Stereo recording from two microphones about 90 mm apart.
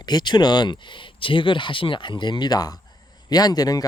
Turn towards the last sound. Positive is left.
turn(degrees=45)  # may be behind; listen again after turning